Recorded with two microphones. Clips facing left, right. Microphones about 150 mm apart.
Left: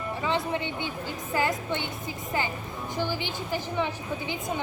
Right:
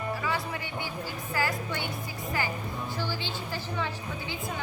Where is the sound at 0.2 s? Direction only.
25° left (ahead or behind).